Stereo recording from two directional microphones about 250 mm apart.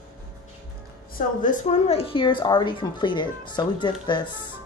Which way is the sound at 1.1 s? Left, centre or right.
Left.